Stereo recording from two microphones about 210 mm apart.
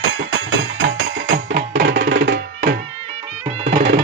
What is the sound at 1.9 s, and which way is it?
Music, 60° right (ahead or behind).